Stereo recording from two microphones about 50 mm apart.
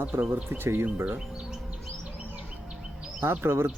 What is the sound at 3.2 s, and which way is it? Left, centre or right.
Speech, right.